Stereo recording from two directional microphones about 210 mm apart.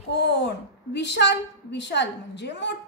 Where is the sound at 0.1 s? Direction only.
55° left (ahead or behind).